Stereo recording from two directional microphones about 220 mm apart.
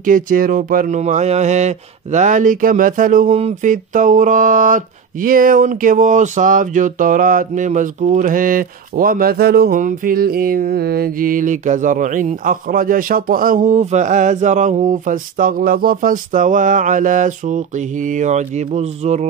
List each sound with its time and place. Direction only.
0.0 s speech: 40° right (ahead or behind)